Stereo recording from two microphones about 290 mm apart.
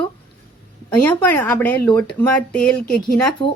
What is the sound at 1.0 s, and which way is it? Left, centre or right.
A woman's voice, centre.